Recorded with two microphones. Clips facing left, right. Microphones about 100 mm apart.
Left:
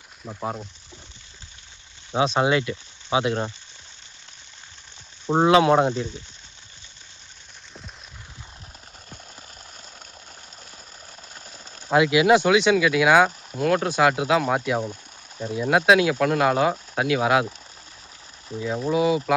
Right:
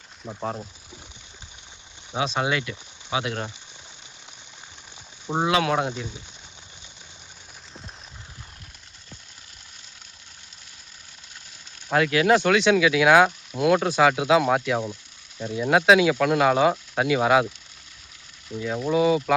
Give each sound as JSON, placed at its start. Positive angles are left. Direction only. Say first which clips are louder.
{"t": 0.3, "sound": "speech", "louder": "even", "side_deg": 5}
{"t": 2.1, "sound": "speech", "louder": "left 5 dB", "side_deg": 25}
{"t": 5.2, "sound": "speech", "louder": "left 6 dB", "side_deg": 15}
{"t": 5.9, "sound": "speech", "louder": "left 6 dB", "side_deg": -15}
{"t": 11.9, "sound": "speech", "louder": "left 3 dB", "side_deg": 15}
{"t": 12.3, "sound": "speech", "louder": "even", "side_deg": 0}
{"t": 18.9, "sound": "speech", "louder": "right 1 dB", "side_deg": 5}